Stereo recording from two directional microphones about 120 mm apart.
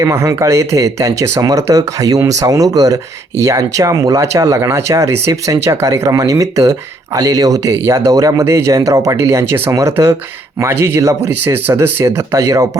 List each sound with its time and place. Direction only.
0.0 s speech: 25° right (ahead or behind)